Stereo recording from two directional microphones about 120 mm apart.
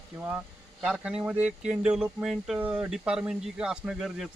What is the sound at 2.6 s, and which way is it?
Speech, 15° right (ahead or behind).